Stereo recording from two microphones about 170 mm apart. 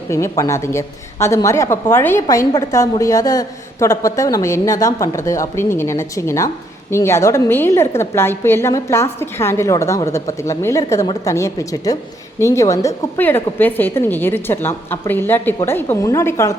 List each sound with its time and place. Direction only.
0.1 s a woman's voice: 15° left (ahead or behind)